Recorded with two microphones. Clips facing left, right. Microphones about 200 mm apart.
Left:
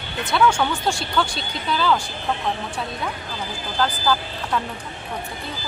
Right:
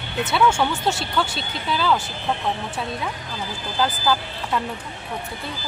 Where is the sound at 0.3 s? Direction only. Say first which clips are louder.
Left 1 dB; 5° right (ahead or behind).